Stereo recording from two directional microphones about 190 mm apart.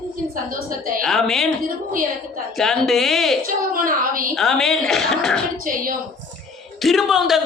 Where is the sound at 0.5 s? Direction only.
45° right (ahead or behind).